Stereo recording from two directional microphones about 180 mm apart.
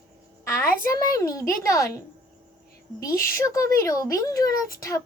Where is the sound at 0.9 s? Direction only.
20° left (ahead or behind).